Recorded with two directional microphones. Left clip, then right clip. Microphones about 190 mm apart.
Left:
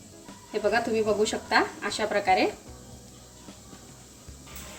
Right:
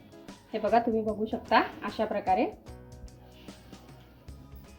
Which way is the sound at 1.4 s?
10° right (ahead or behind).